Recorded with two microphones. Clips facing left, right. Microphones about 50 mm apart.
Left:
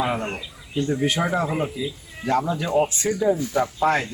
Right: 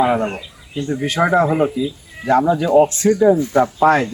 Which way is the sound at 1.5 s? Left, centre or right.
Centre.